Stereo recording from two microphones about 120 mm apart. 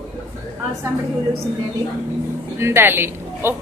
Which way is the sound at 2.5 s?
20° right (ahead or behind).